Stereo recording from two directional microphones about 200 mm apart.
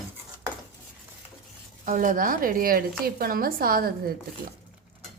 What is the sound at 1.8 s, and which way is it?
Speech, 40° right (ahead or behind).